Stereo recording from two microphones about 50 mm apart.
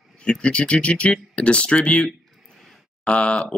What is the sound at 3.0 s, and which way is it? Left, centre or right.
Speech, left.